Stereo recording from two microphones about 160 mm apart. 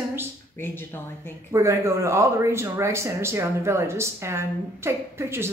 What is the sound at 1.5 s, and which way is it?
Speech, 20° right (ahead or behind).